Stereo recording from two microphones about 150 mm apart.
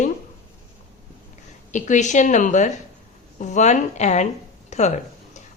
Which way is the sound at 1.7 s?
55° left (ahead or behind).